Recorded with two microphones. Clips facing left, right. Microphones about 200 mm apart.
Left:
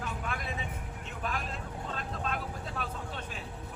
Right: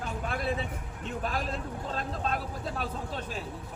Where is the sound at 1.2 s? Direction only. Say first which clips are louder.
Right 3 dB; 35° right (ahead or behind).